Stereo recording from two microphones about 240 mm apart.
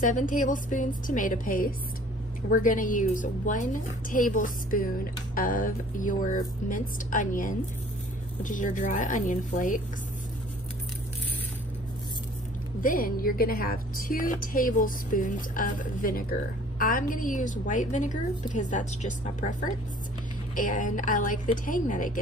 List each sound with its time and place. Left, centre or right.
0.0 s a woman's voice: left
12.8 s a woman's voice: left